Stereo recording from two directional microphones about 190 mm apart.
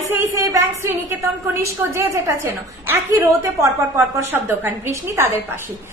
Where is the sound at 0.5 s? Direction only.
15° right (ahead or behind).